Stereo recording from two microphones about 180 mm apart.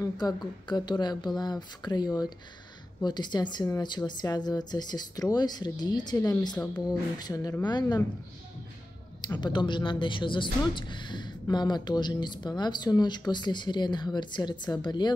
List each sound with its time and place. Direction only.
0.0 s a woman's voice: 25° left (ahead or behind)
9.3 s a woman's voice: 25° left (ahead or behind)